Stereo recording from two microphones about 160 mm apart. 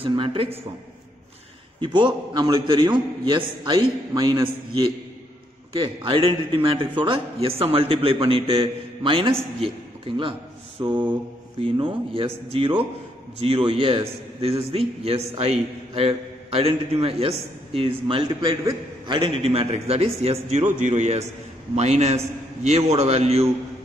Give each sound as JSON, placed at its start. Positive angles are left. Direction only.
{"t": 0.0, "sound": "a man's voice", "side_deg": -35}
{"t": 1.8, "sound": "a man's voice", "side_deg": -30}